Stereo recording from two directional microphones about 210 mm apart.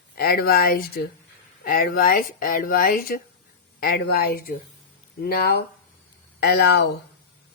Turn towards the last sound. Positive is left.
turn(degrees=50)  # may be behind; listen again after turning